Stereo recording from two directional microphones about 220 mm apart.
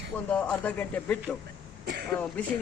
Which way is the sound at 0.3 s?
5° left (ahead or behind).